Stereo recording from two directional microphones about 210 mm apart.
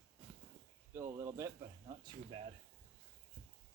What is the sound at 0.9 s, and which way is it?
Speech, 15° right (ahead or behind).